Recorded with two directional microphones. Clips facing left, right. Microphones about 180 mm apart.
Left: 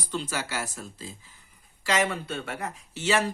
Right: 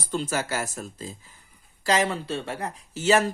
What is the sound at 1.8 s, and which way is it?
Speech, 35° right (ahead or behind).